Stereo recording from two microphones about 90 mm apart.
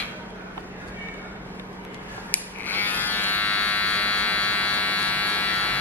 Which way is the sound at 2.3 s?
20° left (ahead or behind).